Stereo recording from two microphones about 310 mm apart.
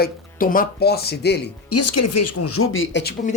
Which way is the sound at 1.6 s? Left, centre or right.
Left.